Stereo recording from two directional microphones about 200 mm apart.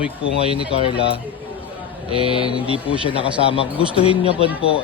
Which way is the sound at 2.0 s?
25° right (ahead or behind).